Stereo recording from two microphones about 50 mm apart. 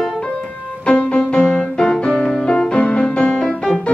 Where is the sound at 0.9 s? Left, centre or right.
Left.